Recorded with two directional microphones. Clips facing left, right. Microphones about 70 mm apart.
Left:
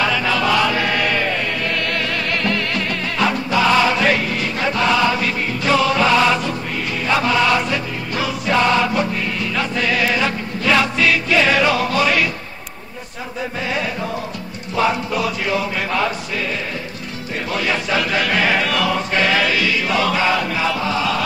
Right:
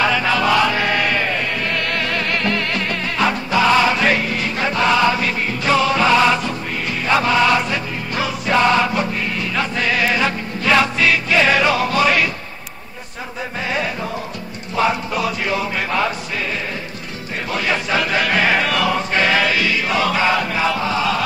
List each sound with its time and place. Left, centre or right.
0.0 s chant: right
9.5 s music: right
13.6 s chant: right
17.5 s chant: right